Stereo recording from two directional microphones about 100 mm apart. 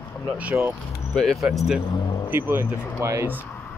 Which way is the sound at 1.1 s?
5° left (ahead or behind).